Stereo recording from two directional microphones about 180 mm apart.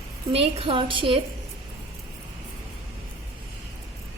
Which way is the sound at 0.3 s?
30° right (ahead or behind).